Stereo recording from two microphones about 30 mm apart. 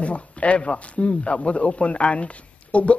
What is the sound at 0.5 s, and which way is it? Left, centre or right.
Speech, left.